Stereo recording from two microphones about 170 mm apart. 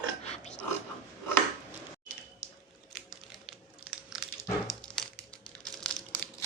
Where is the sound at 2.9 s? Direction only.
Centre (ahead or behind).